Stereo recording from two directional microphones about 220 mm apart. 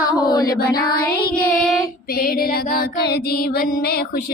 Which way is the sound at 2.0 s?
45° left (ahead or behind).